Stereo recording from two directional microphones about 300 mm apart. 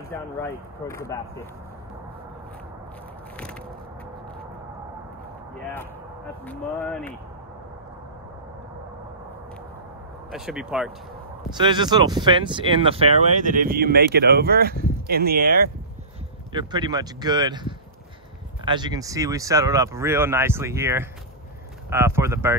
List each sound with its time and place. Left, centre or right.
0.1 s speech: centre
6.4 s speech: centre
10.3 s speech: centre
11.5 s speech: centre; by 15.7 s right
16.5 s speech: centre